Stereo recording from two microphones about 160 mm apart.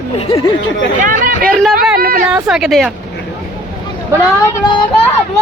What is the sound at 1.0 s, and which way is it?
Speech, 55° right (ahead or behind).